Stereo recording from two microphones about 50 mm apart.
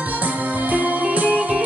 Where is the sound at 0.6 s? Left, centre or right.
Right.